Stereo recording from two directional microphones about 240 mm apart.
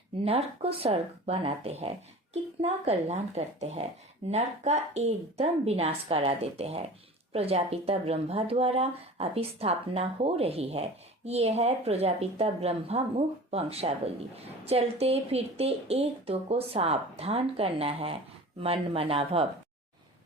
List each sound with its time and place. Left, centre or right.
0.3 s speech: right